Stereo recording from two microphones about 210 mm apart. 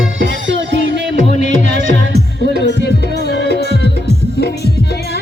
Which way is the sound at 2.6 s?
55° left (ahead or behind).